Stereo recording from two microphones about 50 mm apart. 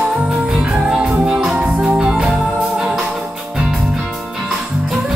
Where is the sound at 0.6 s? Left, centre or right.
Centre.